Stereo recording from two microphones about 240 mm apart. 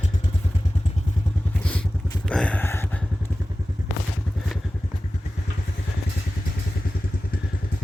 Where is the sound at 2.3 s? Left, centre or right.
Centre.